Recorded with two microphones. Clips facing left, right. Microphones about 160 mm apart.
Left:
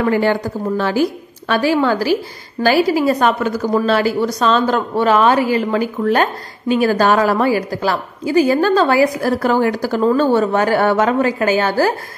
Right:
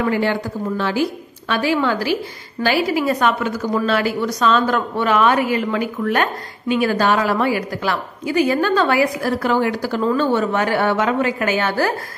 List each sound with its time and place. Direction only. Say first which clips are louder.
0.0 s a woman's voice: left 4 dB; 45° left (ahead or behind)